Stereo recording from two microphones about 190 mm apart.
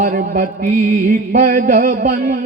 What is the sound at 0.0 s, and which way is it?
Mantra, 45° right (ahead or behind).